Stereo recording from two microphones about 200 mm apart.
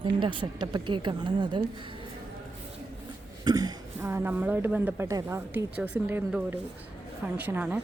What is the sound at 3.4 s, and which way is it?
Speech, 20° right (ahead or behind).